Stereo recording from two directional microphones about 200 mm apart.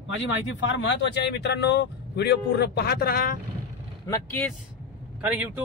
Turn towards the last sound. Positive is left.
turn(degrees=-5)  # may be behind; listen again after turning